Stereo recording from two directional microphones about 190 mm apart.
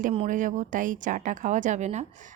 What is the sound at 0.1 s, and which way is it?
Speech, 35° right (ahead or behind).